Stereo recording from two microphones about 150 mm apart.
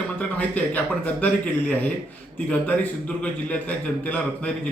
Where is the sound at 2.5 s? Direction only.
10° left (ahead or behind).